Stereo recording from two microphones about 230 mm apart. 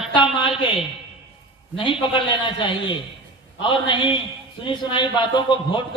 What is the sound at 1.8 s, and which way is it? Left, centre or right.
A man's voice, left.